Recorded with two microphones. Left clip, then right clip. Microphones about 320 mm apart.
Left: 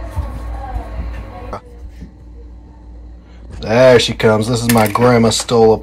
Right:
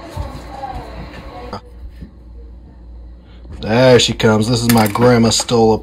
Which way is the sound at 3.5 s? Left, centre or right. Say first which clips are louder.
Left 2 dB; centre.